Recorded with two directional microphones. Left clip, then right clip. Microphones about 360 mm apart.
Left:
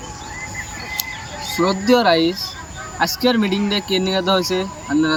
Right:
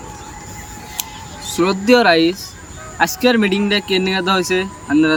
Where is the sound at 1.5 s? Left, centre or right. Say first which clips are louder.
Right 3 dB; centre.